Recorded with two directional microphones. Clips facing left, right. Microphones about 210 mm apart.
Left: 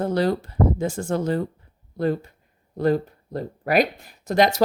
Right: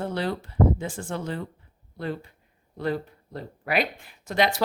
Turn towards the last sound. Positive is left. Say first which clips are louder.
# left 5 dB
turn(degrees=40)  # may be behind; listen again after turning